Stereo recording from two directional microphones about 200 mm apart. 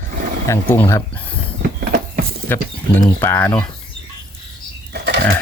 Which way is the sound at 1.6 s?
50° right (ahead or behind).